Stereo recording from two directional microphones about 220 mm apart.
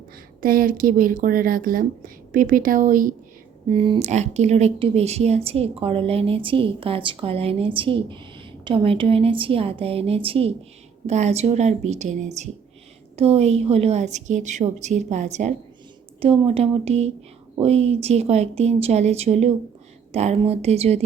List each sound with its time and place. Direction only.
0.4 s a woman's voice: 40° right (ahead or behind)
3.7 s a woman's voice: 25° right (ahead or behind)